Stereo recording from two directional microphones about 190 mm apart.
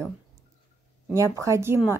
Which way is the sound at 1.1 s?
15° right (ahead or behind).